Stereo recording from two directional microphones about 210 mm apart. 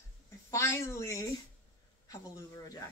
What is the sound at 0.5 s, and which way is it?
Speech, 15° left (ahead or behind).